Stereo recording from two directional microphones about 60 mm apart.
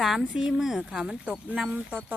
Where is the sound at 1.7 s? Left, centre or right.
Right.